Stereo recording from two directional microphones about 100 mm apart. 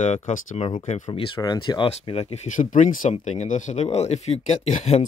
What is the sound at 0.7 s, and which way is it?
Speech, 60° left (ahead or behind).